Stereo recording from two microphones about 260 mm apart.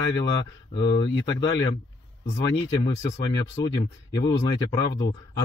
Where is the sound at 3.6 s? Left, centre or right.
Centre.